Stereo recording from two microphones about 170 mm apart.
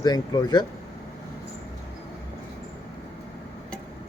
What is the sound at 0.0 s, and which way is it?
Speech, 25° left (ahead or behind).